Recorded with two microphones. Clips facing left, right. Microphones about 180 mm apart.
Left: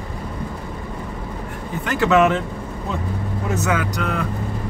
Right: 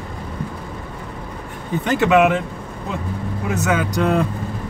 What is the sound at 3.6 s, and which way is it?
Speech, 25° right (ahead or behind).